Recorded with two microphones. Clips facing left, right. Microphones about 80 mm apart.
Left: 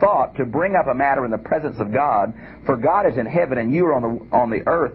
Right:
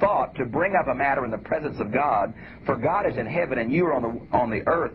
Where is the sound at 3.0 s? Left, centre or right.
Left.